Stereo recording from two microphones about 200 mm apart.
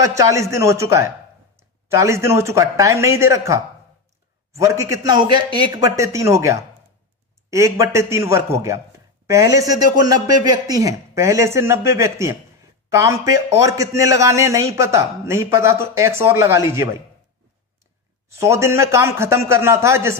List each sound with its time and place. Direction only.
0.0 s a man's voice: 15° right (ahead or behind)
18.3 s a man's voice: 15° right (ahead or behind)